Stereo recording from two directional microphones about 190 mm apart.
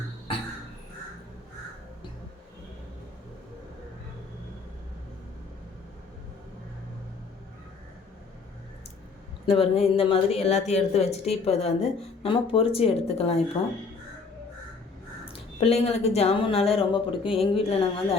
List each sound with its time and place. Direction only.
9.5 s a woman's voice: 30° left (ahead or behind)
15.3 s a woman's voice: 35° left (ahead or behind)